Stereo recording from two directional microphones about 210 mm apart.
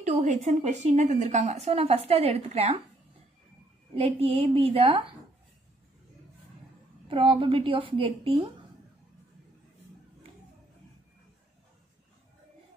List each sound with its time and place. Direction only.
0.0 s speech: 35° right (ahead or behind)
3.9 s a woman's voice: 25° right (ahead or behind)
7.1 s a woman's voice: 25° right (ahead or behind)